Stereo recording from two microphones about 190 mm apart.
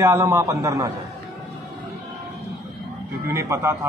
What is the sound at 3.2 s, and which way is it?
Speech, 15° right (ahead or behind).